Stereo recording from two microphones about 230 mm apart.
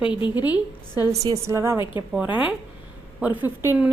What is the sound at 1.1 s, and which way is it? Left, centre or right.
A woman's voice, centre.